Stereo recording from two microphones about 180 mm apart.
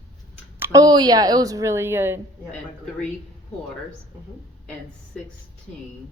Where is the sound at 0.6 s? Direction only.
20° right (ahead or behind).